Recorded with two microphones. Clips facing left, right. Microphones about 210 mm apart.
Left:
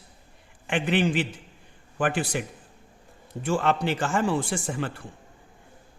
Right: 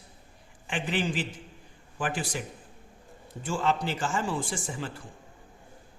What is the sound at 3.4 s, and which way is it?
A man's voice, 65° left (ahead or behind).